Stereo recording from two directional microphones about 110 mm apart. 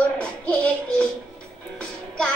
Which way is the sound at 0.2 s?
10° left (ahead or behind).